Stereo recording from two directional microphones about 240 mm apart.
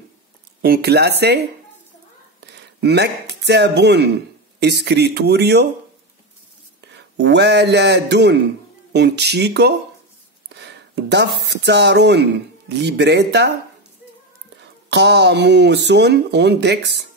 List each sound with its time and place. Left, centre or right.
0.6 s speech: right
2.4 s speech: right
6.9 s speech: right
14.9 s speech: right